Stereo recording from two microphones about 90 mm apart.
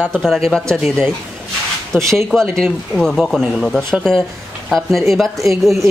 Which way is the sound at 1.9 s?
20° right (ahead or behind).